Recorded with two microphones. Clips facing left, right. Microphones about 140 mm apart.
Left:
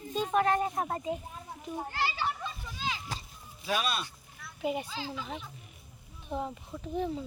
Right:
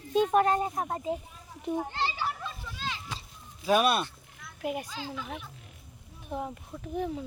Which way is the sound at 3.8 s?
55° right (ahead or behind).